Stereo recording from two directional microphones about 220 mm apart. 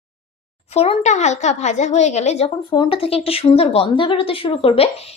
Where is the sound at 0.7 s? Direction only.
30° left (ahead or behind).